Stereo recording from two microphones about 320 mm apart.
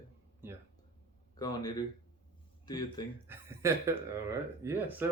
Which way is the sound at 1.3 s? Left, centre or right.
Centre.